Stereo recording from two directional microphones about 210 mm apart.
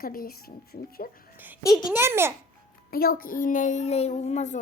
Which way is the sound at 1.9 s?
10° right (ahead or behind).